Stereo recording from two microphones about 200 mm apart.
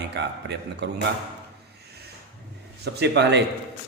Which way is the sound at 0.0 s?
60° right (ahead or behind).